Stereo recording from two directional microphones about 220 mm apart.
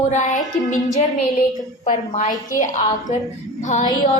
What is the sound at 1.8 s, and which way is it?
A woman's voice, 35° left (ahead or behind).